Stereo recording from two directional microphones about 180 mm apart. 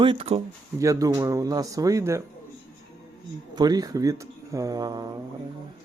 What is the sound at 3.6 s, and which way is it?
A man's voice, 20° right (ahead or behind).